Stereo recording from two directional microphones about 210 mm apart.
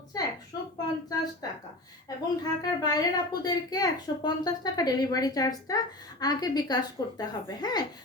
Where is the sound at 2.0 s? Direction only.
15° left (ahead or behind).